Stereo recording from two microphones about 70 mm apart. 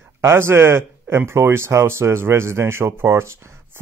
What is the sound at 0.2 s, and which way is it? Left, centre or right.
Speech, right.